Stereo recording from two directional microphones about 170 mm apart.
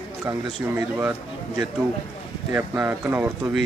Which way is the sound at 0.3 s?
15° right (ahead or behind).